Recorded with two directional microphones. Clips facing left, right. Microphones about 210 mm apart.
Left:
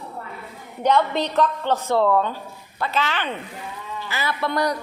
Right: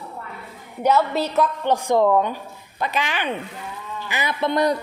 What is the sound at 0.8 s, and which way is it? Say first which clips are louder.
A woman's voice: right 1 dB; 5° right (ahead or behind).